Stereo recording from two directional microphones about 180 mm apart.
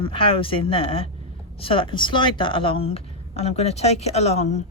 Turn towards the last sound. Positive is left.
turn(degrees=35)  # may be behind; listen again after turning